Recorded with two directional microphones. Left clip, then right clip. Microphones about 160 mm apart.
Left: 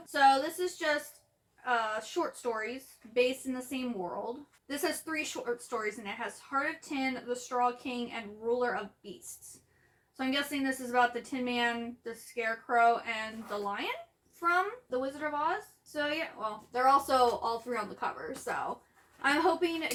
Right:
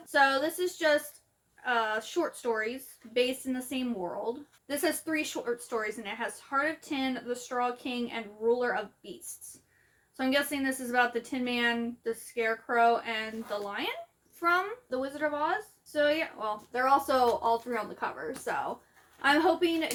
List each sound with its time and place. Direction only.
0.0 s speech: 40° right (ahead or behind)
4.8 s speech: 40° right (ahead or behind)
10.2 s speech: 35° right (ahead or behind)